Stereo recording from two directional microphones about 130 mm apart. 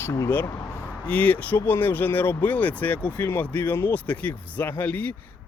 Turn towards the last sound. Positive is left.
turn(degrees=10)  # may be behind; listen again after turning